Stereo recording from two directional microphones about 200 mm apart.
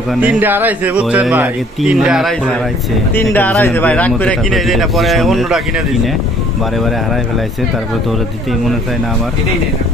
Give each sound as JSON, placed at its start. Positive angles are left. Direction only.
{"t": 0.1, "sound": "speech", "side_deg": -5}